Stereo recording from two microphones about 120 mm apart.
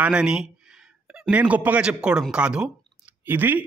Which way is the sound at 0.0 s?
10° right (ahead or behind).